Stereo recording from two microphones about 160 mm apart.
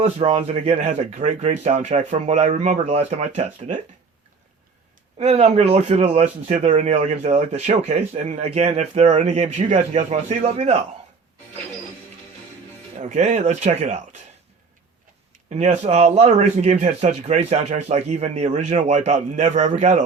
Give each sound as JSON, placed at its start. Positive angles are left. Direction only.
{"t": 0.0, "sound": "speech", "side_deg": -40}
{"t": 5.2, "sound": "speech", "side_deg": -45}
{"t": 13.0, "sound": "speech", "side_deg": -45}
{"t": 15.4, "sound": "speech", "side_deg": -45}